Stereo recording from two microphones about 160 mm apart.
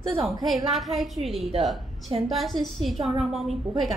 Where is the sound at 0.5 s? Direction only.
Centre (ahead or behind).